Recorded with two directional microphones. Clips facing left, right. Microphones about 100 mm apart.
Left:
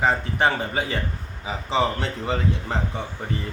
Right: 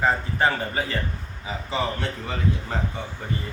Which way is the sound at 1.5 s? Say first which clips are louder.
Left 4 dB; 25° left (ahead or behind).